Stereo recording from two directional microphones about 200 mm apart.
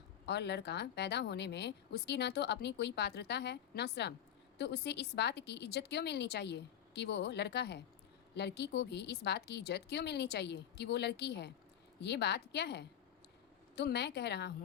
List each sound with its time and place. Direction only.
0.3 s speech: 55° left (ahead or behind)